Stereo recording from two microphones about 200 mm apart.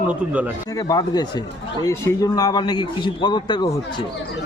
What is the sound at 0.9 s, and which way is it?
A man's voice, 20° left (ahead or behind).